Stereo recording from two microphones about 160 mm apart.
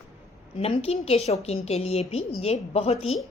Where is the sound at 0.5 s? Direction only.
35° left (ahead or behind).